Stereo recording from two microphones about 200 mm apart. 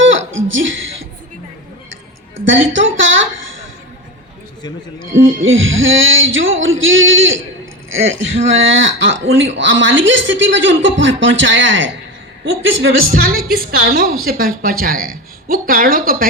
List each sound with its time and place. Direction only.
0.0 s chuckle: 75° right (ahead or behind)
2.4 s speech: 70° right (ahead or behind)
5.1 s speech: 75° right (ahead or behind)
13.5 s a woman's voice: 50° right (ahead or behind)